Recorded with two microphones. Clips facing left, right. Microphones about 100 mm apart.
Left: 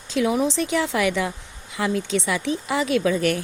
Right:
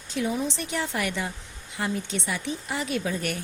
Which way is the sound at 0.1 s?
90° left.